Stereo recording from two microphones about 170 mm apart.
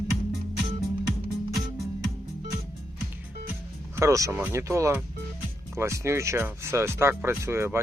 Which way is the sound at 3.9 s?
20° right (ahead or behind).